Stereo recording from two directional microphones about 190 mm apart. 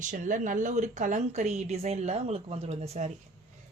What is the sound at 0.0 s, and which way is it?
Speech, 40° right (ahead or behind).